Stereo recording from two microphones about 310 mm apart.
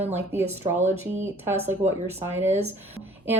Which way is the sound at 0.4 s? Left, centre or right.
Right.